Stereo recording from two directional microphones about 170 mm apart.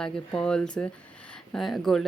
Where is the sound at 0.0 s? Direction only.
5° left (ahead or behind).